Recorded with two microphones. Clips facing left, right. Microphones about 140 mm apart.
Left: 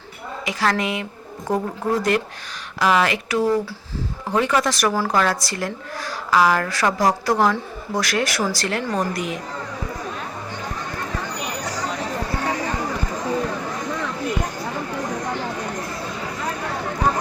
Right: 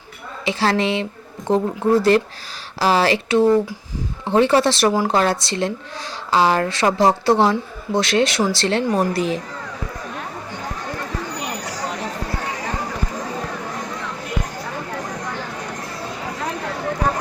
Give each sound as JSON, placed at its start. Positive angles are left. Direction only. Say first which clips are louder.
{"t": 0.4, "sound": "a woman's voice", "louder": "right 3 dB", "side_deg": -30}